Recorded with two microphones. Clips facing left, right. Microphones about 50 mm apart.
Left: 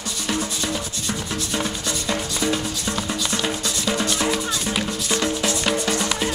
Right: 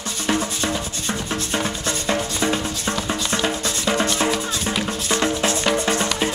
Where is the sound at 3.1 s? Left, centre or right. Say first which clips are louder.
Right 3 dB; right.